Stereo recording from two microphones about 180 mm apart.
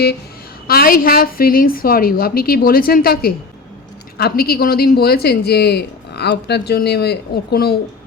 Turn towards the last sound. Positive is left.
turn(degrees=60)  # may be behind; listen again after turning